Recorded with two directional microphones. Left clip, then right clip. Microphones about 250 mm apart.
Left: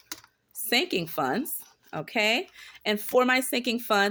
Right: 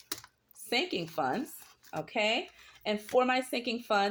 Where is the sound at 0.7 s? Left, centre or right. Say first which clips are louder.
Left 6 dB; left.